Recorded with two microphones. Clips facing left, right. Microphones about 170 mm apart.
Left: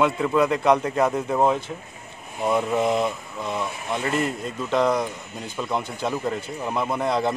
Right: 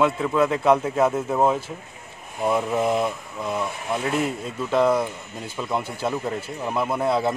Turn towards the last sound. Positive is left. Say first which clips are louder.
# right 1 dB
turn(degrees=-5)  # may be behind; listen again after turning